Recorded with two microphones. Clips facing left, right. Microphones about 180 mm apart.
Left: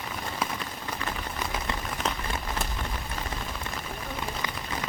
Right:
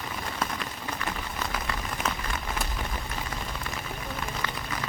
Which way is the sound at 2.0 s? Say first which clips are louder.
Even; 10° right (ahead or behind).